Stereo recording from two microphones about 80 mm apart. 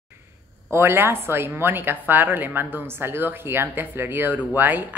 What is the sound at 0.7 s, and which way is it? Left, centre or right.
A woman's voice, right.